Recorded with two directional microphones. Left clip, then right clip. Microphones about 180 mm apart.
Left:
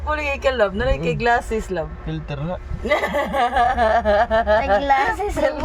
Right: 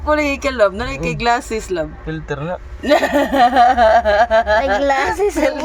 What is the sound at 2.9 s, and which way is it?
Speech, 65° right (ahead or behind).